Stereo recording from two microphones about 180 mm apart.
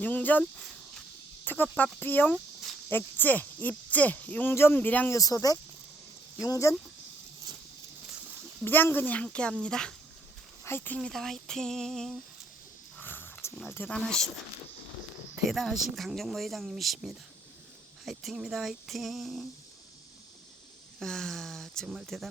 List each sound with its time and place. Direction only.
0.0 s speech: 10° left (ahead or behind)
1.5 s speech: 10° left (ahead or behind)
8.6 s speech: 10° left (ahead or behind)
13.0 s a sound: 10° left (ahead or behind)
15.4 s speech: centre (ahead or behind)
21.0 s speech: centre (ahead or behind)